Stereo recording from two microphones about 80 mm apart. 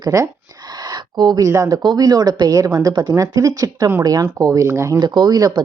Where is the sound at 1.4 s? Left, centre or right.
Right.